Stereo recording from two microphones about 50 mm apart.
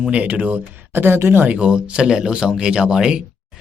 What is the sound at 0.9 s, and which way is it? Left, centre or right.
Speech, right.